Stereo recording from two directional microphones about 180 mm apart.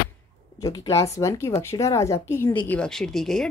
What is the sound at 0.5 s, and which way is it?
Speech, 20° left (ahead or behind).